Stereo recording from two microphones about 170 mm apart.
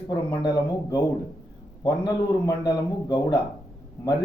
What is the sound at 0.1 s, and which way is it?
Speech, 25° left (ahead or behind).